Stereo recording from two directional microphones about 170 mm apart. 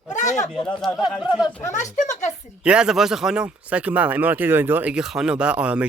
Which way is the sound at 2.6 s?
5° right (ahead or behind).